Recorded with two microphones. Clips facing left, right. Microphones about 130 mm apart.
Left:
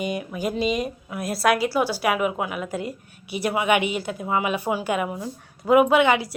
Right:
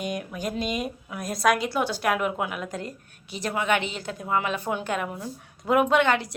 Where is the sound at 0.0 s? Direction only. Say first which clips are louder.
Left 4 dB; 5° left (ahead or behind).